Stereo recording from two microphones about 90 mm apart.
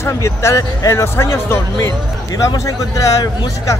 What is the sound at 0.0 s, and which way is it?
Speech, 30° left (ahead or behind).